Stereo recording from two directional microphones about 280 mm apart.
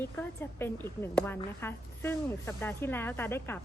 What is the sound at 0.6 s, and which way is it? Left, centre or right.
A woman's voice, centre.